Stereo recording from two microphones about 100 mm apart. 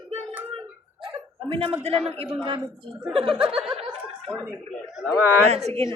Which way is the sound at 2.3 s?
55° right (ahead or behind).